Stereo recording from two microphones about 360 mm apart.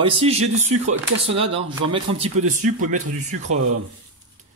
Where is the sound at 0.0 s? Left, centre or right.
Centre.